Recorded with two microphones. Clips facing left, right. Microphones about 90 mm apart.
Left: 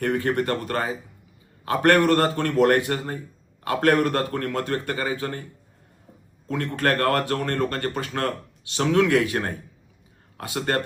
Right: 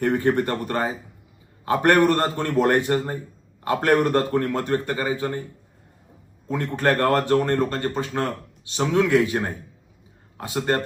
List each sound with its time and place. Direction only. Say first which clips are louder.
0.0 s a man's voice: right 3 dB; 20° right (ahead or behind)
6.5 s a man's voice: right 2 dB; 20° right (ahead or behind)